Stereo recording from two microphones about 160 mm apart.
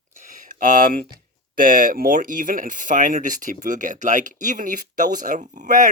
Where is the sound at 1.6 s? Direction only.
60° right (ahead or behind).